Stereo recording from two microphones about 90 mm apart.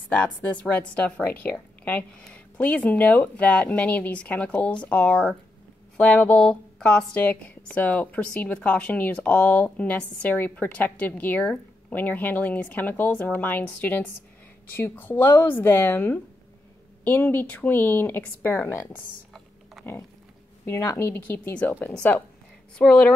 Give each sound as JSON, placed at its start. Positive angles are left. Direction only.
{"t": 0.1, "sound": "speech", "side_deg": 15}
{"t": 19.8, "sound": "a sound", "side_deg": 0}
{"t": 20.6, "sound": "speech", "side_deg": 30}